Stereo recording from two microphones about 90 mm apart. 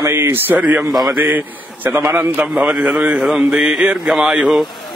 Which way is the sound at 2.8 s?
10° right (ahead or behind).